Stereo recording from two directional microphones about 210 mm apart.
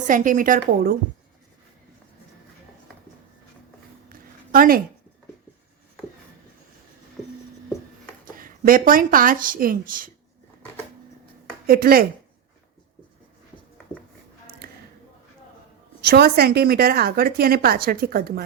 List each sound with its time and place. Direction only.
0.1 s a woman's voice: 40° right (ahead or behind)
4.1 s a sound: 40° right (ahead or behind)
8.2 s speech: 40° right (ahead or behind)
11.6 s speech: 45° right (ahead or behind)
16.0 s a woman's voice: 50° right (ahead or behind)